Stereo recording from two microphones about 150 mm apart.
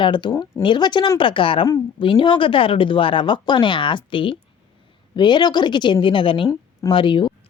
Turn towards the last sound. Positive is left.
turn(degrees=35)  # may be behind; listen again after turning